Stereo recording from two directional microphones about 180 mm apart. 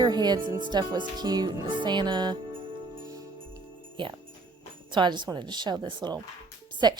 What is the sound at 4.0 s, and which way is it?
A woman's voice, 25° right (ahead or behind).